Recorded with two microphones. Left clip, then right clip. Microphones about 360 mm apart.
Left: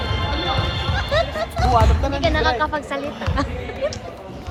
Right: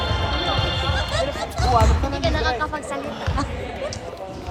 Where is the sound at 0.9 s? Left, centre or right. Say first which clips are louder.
Left 3 dB; centre.